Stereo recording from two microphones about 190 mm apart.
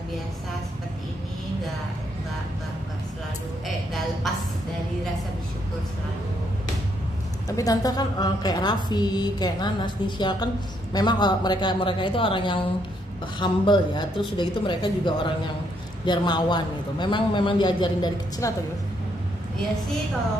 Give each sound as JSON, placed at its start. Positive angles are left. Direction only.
{"t": 3.6, "sound": "music", "side_deg": 0}
{"t": 7.4, "sound": "a woman's voice", "side_deg": 20}